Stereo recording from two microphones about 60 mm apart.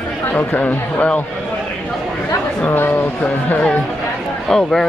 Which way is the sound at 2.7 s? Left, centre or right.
Left.